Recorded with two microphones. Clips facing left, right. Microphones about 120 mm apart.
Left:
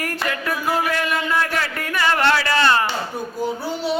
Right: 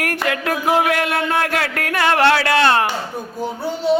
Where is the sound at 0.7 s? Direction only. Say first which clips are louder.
Right 5 dB; 65° right (ahead or behind).